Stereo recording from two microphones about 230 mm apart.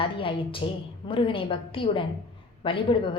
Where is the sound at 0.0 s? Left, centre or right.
Left.